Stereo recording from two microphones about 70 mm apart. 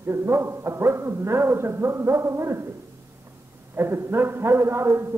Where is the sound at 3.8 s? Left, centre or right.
Right.